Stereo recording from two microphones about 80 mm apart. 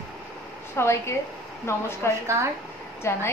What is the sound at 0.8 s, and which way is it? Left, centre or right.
A woman's voice, left.